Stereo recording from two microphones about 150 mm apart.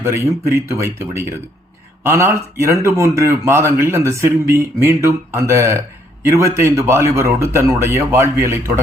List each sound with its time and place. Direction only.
0.0 s a man's voice: 20° right (ahead or behind)